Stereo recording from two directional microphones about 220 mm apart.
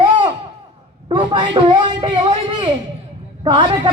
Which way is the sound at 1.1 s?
20° right (ahead or behind).